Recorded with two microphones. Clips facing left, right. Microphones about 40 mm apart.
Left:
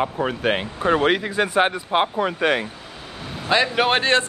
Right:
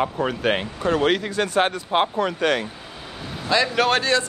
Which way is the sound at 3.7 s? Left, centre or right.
Left.